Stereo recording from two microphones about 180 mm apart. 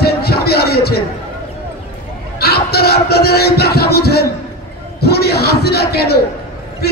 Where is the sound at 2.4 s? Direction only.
60° left (ahead or behind).